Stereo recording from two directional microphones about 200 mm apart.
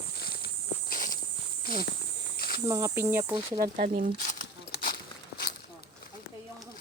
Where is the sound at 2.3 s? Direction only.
50° left (ahead or behind).